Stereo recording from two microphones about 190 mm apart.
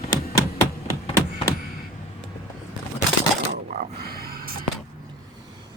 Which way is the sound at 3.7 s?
55° right (ahead or behind).